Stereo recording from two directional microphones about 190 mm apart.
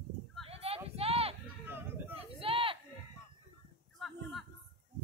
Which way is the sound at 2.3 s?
30° right (ahead or behind).